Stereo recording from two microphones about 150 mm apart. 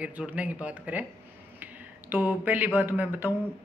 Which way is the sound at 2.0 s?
10° right (ahead or behind).